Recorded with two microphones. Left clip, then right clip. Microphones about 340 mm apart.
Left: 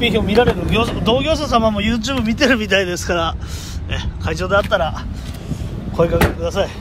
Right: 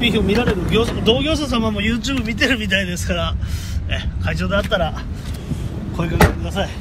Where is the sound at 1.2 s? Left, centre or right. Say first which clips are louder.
Left 5 dB; centre.